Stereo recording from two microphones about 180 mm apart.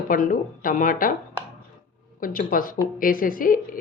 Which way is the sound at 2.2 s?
50° left (ahead or behind).